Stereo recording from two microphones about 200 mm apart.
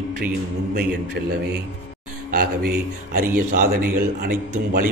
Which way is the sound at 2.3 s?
45° right (ahead or behind).